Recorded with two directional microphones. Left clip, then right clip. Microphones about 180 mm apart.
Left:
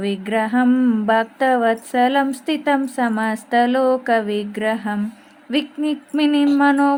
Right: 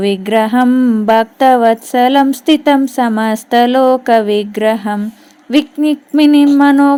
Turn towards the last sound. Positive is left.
turn(degrees=-35)  # may be behind; listen again after turning